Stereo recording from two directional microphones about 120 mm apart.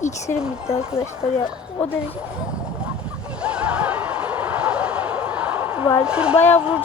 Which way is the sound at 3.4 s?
10° right (ahead or behind).